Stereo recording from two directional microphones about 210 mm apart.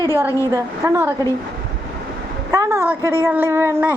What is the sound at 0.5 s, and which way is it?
Speech, 10° right (ahead or behind).